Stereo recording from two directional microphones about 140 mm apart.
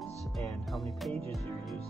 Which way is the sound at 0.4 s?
Centre (ahead or behind).